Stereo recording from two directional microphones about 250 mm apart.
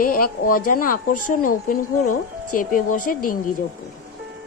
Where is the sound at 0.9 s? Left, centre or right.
Left.